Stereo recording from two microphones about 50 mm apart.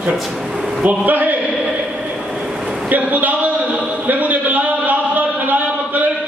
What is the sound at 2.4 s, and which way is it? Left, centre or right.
Vehicle, centre.